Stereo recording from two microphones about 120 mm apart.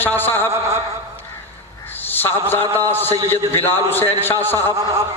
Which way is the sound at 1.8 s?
15° left (ahead or behind).